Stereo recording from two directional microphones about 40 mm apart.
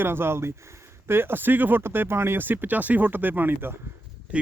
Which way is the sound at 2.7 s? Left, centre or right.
Right.